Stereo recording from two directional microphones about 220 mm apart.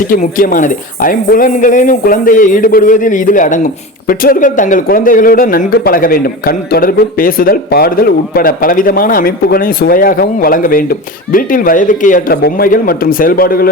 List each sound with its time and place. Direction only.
0.1 s a man's voice: 40° left (ahead or behind)